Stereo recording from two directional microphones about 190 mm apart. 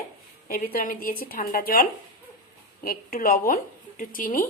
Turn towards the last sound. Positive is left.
turn(degrees=45)  # may be behind; listen again after turning